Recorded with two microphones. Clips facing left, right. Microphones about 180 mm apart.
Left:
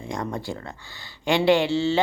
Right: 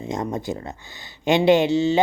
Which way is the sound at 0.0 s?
20° right (ahead or behind).